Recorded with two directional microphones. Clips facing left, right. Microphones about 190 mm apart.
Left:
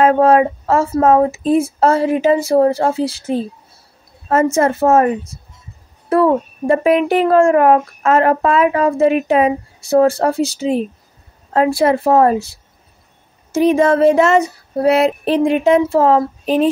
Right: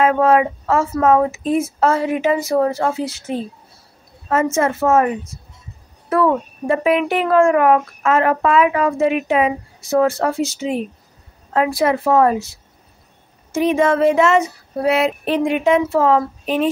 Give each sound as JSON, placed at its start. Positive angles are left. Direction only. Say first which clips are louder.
{"t": 0.0, "sound": "speech", "louder": "left 3 dB", "side_deg": 35}